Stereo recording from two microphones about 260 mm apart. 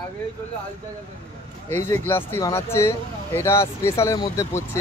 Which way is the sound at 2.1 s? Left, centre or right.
Centre.